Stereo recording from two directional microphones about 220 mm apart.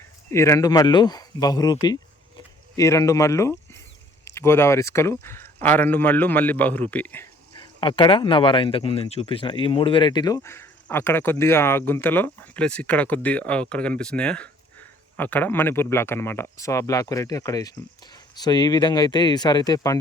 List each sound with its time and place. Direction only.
0.3 s speech: 10° left (ahead or behind)
7.6 s speech: 25° left (ahead or behind)